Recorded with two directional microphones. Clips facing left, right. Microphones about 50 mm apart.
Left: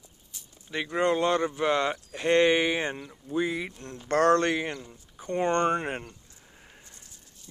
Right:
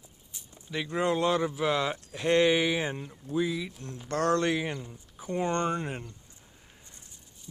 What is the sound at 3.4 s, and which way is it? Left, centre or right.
A man's voice, left.